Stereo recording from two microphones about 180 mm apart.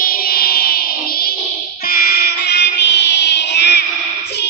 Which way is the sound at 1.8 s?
55° left (ahead or behind).